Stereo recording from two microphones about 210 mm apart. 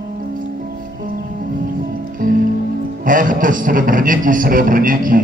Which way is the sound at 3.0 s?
40° right (ahead or behind).